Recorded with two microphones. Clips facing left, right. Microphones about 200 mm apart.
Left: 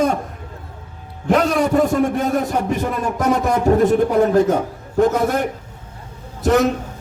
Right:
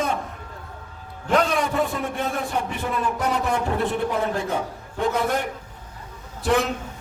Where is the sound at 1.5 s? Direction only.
45° left (ahead or behind).